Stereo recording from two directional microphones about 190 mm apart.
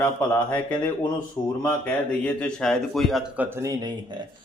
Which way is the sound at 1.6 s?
10° left (ahead or behind).